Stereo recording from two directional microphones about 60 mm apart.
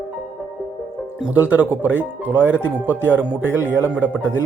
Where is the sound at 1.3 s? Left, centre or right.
Right.